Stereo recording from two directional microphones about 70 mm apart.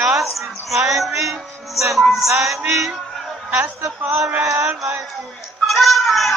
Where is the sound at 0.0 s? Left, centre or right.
Centre.